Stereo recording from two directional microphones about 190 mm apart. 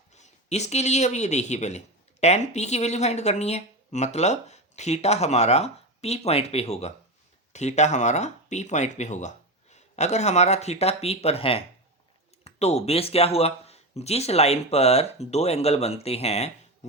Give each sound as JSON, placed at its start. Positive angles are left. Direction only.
{"t": 0.1, "sound": "speech", "side_deg": 35}